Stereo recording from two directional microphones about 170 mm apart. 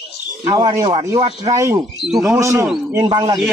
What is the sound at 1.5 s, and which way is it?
A man's voice, 15° right (ahead or behind).